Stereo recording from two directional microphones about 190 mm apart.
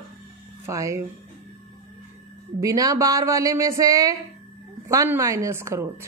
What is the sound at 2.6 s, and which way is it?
A woman's voice, 20° right (ahead or behind).